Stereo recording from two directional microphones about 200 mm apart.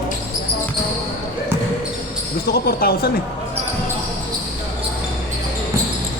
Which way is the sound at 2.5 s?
50° left (ahead or behind).